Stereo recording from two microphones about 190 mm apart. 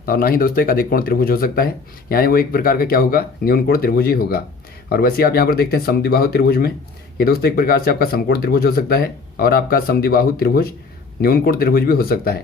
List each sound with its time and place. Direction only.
0.0 s speech: 50° left (ahead or behind)